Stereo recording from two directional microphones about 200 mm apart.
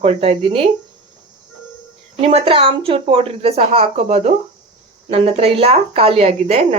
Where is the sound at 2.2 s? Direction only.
25° right (ahead or behind).